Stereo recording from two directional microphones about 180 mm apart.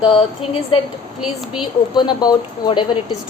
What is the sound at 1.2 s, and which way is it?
Speech, 5° right (ahead or behind).